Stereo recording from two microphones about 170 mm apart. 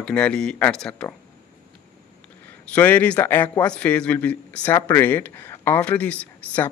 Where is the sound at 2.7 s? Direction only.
10° left (ahead or behind).